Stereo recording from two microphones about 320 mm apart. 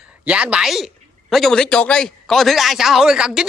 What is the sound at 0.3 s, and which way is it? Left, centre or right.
A man's voice, centre.